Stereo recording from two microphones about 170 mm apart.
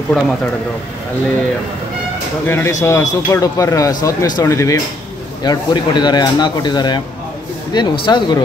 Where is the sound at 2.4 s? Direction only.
15° left (ahead or behind).